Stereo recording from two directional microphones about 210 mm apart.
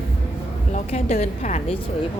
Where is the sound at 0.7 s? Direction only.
35° left (ahead or behind).